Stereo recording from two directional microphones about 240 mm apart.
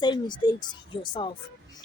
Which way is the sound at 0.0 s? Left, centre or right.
Centre.